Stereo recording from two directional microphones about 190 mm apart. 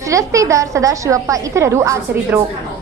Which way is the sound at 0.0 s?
15° right (ahead or behind).